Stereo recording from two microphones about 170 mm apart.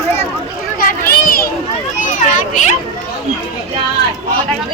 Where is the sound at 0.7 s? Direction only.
60° left (ahead or behind).